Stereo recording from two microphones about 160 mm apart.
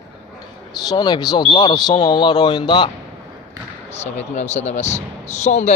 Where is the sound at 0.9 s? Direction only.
25° left (ahead or behind).